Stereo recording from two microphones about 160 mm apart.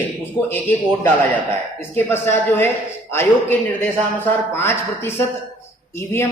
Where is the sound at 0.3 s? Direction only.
15° left (ahead or behind).